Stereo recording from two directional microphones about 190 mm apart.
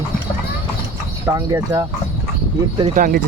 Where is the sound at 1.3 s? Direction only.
15° right (ahead or behind).